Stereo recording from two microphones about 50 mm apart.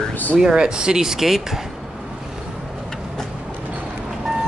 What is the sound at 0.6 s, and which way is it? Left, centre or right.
Speech, centre.